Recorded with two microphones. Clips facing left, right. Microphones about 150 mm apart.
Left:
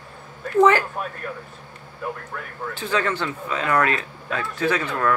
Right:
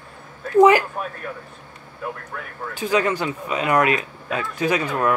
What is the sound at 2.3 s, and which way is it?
Speech, 5° right (ahead or behind).